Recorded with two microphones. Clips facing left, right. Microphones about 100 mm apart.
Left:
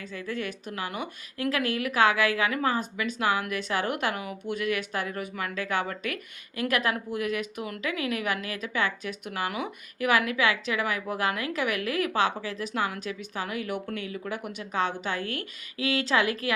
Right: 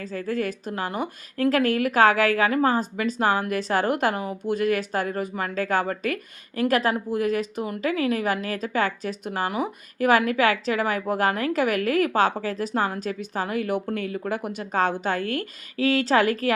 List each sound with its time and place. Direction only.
0.0 s a woman's voice: 40° right (ahead or behind)